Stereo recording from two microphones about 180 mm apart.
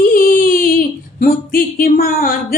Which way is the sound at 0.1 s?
55° left (ahead or behind).